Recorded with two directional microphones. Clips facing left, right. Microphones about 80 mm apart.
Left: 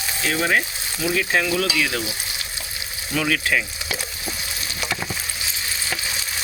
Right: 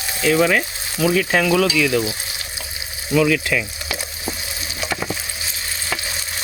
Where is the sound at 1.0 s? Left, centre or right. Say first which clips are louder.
Right 4 dB; right.